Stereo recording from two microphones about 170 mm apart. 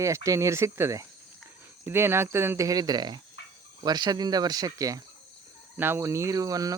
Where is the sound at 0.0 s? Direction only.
20° right (ahead or behind).